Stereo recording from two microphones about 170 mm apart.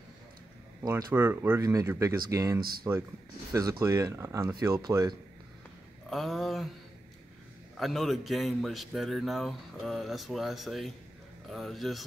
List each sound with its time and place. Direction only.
0.8 s speech: 15° right (ahead or behind)
6.0 s a man's voice: centre (ahead or behind)
7.7 s a man's voice: centre (ahead or behind)